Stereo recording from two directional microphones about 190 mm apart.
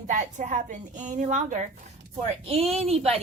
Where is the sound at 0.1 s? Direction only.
40° right (ahead or behind).